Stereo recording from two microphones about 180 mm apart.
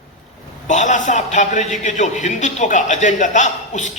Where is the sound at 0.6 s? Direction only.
40° left (ahead or behind).